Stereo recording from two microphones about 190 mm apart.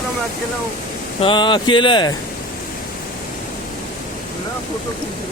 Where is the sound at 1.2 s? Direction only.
25° left (ahead or behind).